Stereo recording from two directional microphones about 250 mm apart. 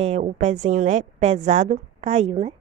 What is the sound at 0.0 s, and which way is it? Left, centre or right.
Speech, right.